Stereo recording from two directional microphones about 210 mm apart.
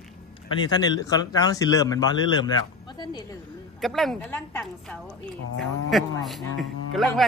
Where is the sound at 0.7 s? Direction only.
20° left (ahead or behind).